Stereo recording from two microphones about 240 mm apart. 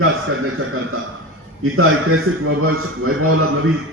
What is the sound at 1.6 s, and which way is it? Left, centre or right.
A man's voice, right.